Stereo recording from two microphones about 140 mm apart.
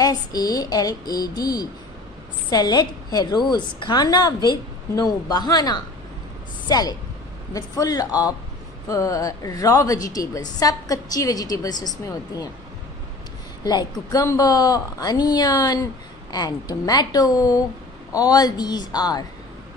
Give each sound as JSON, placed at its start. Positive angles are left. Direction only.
{"t": 0.0, "sound": "a woman's voice", "side_deg": 25}
{"t": 14.1, "sound": "a woman's voice", "side_deg": 25}